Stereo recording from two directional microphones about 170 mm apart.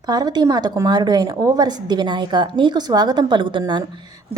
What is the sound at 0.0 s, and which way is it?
A woman's voice, 25° right (ahead or behind).